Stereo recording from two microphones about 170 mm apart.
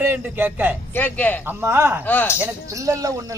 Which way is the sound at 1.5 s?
15° right (ahead or behind).